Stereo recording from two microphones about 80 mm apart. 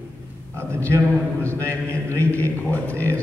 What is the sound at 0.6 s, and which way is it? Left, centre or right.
Speech, right.